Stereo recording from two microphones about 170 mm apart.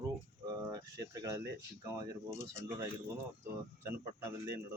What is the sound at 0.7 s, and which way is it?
Speech, 20° right (ahead or behind).